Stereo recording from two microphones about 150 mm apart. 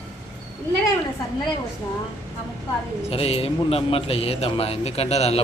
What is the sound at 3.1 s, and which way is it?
A man's voice, 40° left (ahead or behind).